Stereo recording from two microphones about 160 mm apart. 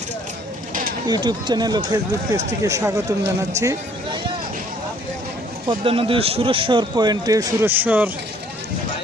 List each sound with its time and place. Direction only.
1.0 s speech: 25° right (ahead or behind)
5.6 s speech: 35° right (ahead or behind); by 8.1 s 10° right (ahead or behind)